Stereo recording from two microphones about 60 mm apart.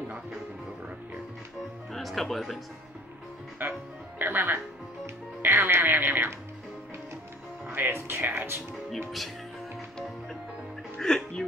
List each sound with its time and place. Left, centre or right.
1.9 s speech: centre
4.2 s speech: right
5.0 s music: right
7.7 s speech: right
11.0 s speech: centre